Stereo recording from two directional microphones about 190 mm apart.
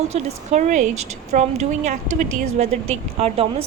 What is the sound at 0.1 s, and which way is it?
Speech, 40° right (ahead or behind).